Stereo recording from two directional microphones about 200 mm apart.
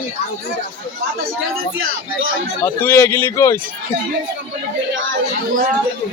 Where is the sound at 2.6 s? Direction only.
10° left (ahead or behind).